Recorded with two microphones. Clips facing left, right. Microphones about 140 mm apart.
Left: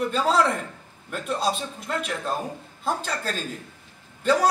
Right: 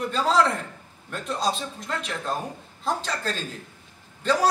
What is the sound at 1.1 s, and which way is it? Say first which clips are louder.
Speech: left 1 dB; 10° left (ahead or behind).